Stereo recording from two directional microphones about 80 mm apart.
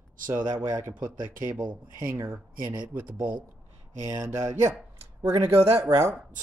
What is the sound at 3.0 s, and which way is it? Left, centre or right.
Speech, right.